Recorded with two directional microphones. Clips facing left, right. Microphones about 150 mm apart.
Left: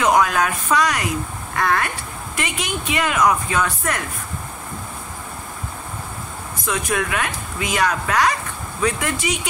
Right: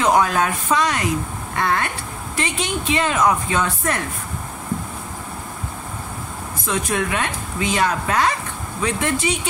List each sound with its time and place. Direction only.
0.0 s a woman's voice: 30° right (ahead or behind)
6.7 s speech: 30° right (ahead or behind)